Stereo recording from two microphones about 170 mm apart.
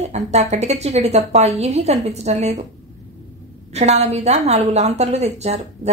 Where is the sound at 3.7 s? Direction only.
40° right (ahead or behind).